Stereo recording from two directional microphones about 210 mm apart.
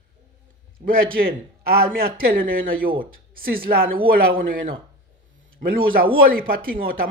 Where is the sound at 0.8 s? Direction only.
45° right (ahead or behind).